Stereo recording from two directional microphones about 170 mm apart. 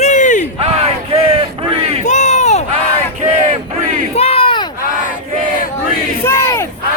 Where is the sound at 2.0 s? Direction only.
45° left (ahead or behind).